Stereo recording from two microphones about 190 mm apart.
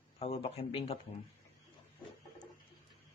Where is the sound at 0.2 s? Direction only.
30° left (ahead or behind).